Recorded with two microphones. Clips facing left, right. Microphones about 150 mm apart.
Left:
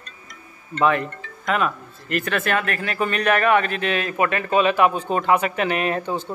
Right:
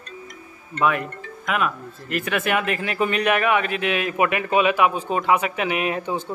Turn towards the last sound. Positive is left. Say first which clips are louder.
# left 1 dB
turn(degrees=-10)  # may be behind; listen again after turning